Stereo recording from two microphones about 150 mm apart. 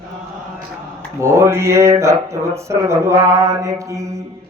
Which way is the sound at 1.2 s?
20° right (ahead or behind).